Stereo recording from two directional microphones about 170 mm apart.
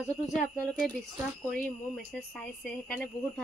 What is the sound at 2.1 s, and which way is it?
Speech, 5° left (ahead or behind).